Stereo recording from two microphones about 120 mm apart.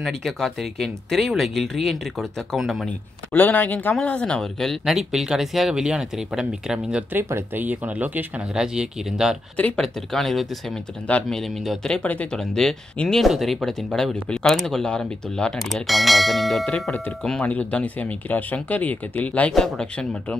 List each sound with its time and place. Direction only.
0.0 s speech: centre (ahead or behind)
3.3 s speech: 15° left (ahead or behind); by 9.4 s 5° right (ahead or behind)
9.6 s speech: 10° left (ahead or behind)